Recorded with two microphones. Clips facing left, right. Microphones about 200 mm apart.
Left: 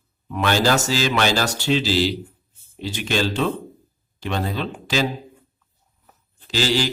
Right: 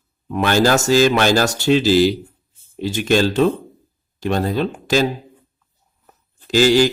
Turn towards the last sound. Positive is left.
turn(degrees=-50)  # may be behind; listen again after turning